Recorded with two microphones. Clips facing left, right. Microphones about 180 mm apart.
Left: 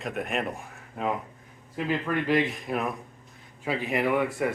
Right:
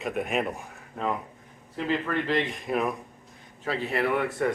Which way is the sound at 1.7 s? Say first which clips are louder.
Even; 10° left (ahead or behind).